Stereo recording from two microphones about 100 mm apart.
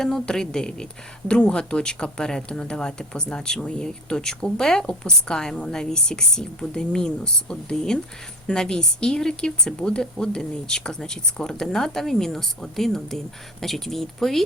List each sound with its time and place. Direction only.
0.0 s speech: 5° left (ahead or behind)